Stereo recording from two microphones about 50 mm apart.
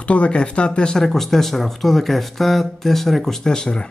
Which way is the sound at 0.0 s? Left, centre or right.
Left.